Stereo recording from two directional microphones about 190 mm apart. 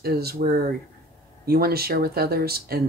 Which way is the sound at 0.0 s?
55° right (ahead or behind).